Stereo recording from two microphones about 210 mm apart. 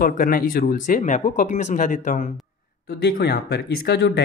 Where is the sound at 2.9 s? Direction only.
50° left (ahead or behind).